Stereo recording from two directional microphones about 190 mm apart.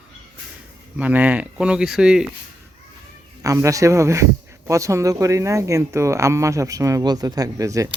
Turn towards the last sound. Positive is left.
turn(degrees=-15)  # may be behind; listen again after turning